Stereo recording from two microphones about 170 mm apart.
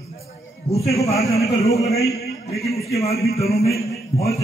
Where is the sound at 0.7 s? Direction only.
35° left (ahead or behind).